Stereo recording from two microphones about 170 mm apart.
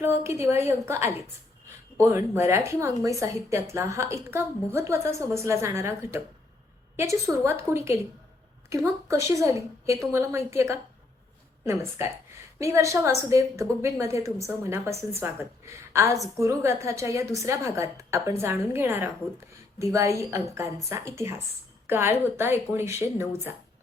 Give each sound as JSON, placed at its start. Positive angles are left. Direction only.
{"t": 0.2, "sound": "a woman's voice", "side_deg": -15}